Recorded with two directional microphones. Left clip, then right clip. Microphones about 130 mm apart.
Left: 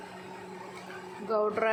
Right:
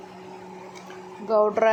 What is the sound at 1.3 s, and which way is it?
Speech, 25° right (ahead or behind).